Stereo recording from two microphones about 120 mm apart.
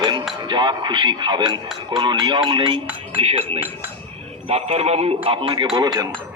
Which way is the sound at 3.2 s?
55° right (ahead or behind).